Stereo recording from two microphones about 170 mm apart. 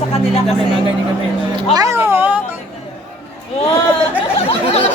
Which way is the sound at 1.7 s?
20° right (ahead or behind).